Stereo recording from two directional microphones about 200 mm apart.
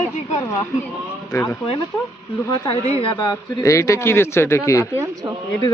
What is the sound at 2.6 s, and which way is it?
Speech, 30° left (ahead or behind).